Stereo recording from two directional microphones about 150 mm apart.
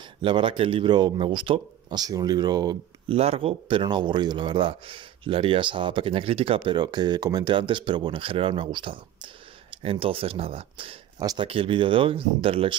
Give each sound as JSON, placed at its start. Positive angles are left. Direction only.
{"t": 0.2, "sound": "speech", "side_deg": -35}
{"t": 3.1, "sound": "speech", "side_deg": -40}
{"t": 11.1, "sound": "speech", "side_deg": -25}
{"t": 11.4, "sound": "speech", "side_deg": -35}